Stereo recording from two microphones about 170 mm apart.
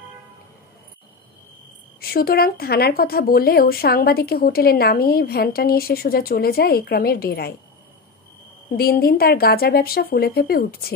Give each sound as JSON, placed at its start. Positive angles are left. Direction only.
{"t": 2.0, "sound": "speech", "side_deg": 65}
{"t": 8.7, "sound": "speech", "side_deg": 65}